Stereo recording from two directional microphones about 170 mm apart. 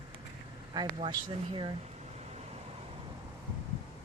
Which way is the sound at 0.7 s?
30° right (ahead or behind).